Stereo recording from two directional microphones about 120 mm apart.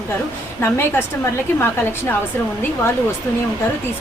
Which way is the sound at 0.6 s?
20° left (ahead or behind).